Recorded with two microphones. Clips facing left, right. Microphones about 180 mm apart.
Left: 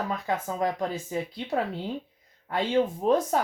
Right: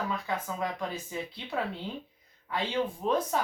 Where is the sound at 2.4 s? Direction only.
45° left (ahead or behind).